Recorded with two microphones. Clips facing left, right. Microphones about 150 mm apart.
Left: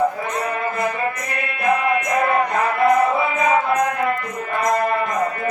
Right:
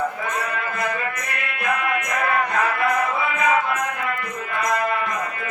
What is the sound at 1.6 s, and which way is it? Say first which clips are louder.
Music: left 6 dB; 30° left (ahead or behind).